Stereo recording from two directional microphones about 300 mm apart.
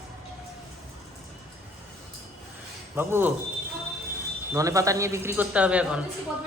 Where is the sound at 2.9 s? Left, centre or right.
Centre.